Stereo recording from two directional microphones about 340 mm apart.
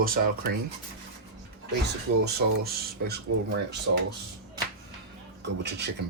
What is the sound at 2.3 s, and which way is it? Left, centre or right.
Speech, right.